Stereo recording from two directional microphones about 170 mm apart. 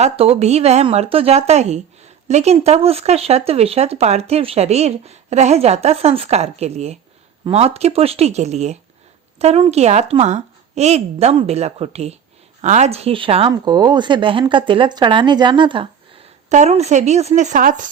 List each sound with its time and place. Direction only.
0.0 s speech: 40° right (ahead or behind)
16.5 s speech: 40° right (ahead or behind)